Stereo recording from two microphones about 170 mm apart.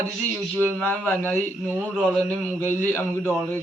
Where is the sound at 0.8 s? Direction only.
10° left (ahead or behind).